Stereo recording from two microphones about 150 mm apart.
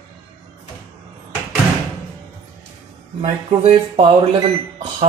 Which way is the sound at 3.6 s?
50° right (ahead or behind).